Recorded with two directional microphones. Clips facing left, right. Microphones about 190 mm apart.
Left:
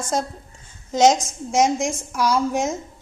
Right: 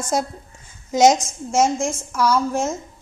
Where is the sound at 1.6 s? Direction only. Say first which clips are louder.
Left 1 dB; 15° left (ahead or behind).